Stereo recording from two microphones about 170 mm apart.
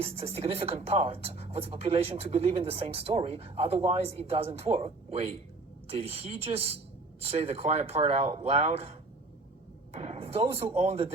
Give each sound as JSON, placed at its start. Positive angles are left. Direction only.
{"t": 0.0, "sound": "speech", "side_deg": -35}